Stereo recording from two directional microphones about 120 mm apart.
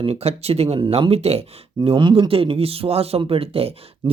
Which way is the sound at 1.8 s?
45° right (ahead or behind).